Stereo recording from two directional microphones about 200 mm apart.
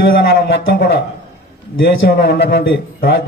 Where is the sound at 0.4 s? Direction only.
50° left (ahead or behind).